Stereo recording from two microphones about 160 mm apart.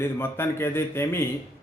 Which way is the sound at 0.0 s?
15° left (ahead or behind).